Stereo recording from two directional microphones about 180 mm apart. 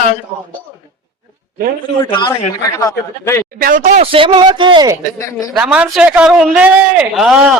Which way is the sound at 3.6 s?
45° right (ahead or behind).